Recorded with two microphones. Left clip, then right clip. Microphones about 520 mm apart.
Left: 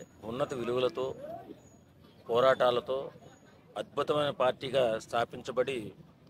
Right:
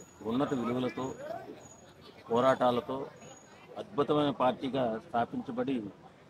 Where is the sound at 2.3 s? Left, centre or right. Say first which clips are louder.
Left 1 dB; left.